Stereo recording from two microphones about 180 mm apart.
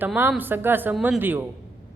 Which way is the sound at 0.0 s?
10° right (ahead or behind).